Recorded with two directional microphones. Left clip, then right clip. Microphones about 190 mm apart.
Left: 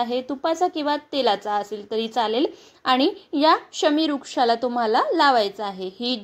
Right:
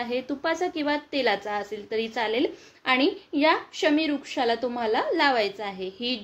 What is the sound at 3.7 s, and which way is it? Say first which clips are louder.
Speech: left 3 dB; 30° left (ahead or behind).